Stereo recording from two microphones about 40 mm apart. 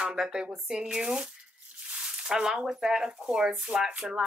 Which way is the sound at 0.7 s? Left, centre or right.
Centre.